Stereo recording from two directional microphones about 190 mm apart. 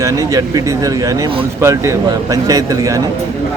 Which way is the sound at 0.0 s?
15° right (ahead or behind).